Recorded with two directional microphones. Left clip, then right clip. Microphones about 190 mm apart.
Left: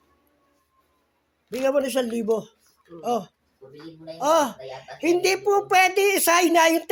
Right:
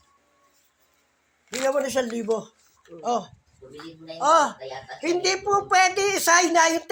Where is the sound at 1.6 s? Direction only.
40° left (ahead or behind).